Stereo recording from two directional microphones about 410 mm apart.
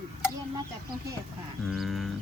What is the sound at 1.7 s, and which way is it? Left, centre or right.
Speech, centre.